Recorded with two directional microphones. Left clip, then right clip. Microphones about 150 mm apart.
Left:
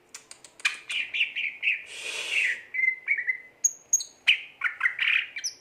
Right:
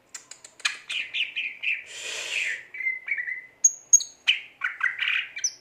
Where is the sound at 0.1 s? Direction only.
Centre (ahead or behind).